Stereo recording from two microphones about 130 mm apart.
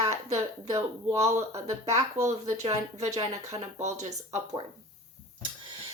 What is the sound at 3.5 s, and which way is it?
Speech, 25° right (ahead or behind).